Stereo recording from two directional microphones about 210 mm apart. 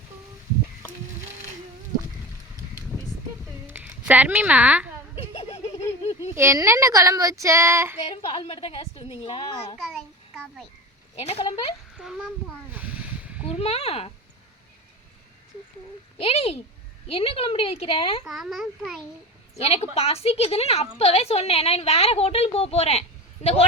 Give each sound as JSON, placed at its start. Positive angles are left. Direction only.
{"t": 3.4, "sound": "a sound", "side_deg": -5}
{"t": 5.1, "sound": "a sound", "side_deg": 25}
{"t": 6.3, "sound": "speech", "side_deg": -10}
{"t": 7.9, "sound": "a woman's voice", "side_deg": 30}
{"t": 9.8, "sound": "a sound", "side_deg": 0}
{"t": 11.2, "sound": "a woman's voice", "side_deg": 30}
{"t": 11.9, "sound": "a child's voice", "side_deg": 0}
{"t": 13.4, "sound": "speech", "side_deg": 30}
{"t": 16.1, "sound": "a woman's voice", "side_deg": 30}
{"t": 18.3, "sound": "a child's voice", "side_deg": 0}
{"t": 19.5, "sound": "a woman's voice", "side_deg": 30}